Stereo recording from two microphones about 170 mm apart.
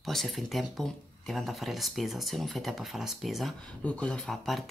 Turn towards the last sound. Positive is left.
turn(degrees=0)  # may be behind; listen again after turning